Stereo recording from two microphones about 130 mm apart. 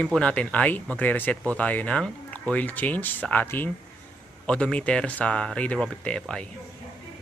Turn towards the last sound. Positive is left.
turn(degrees=5)  # may be behind; listen again after turning